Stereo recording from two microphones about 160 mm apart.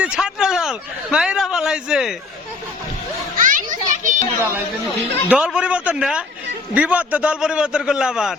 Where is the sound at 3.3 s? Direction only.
55° right (ahead or behind).